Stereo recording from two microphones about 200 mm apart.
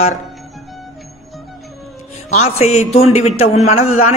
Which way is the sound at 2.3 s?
35° left (ahead or behind).